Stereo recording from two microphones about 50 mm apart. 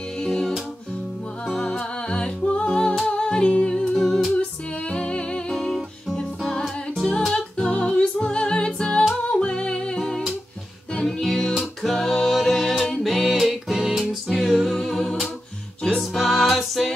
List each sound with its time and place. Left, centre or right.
0.2 s music: centre
1.8 s music: centre
3.1 s humming: centre
4.0 s humming: centre
4.4 s music: centre
5.5 s music: centre
7.3 s music: left
9.9 s music: centre